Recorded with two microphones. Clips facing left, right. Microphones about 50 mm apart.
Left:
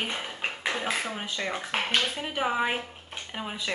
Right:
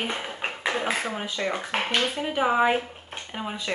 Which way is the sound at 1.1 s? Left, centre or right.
Centre.